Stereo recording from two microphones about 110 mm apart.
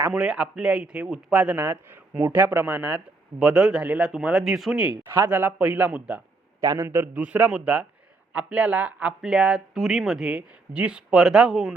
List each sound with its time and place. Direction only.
0.1 s speech: 10° right (ahead or behind)
5.3 s speech: 15° right (ahead or behind)
6.6 s speech: 30° right (ahead or behind); by 11.7 s 5° right (ahead or behind)